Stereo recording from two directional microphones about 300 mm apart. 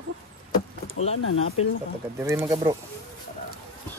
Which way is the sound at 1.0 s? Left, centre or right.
Left.